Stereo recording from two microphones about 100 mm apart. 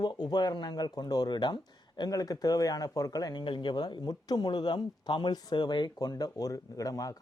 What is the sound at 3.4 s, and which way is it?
Speech, 55° left (ahead or behind).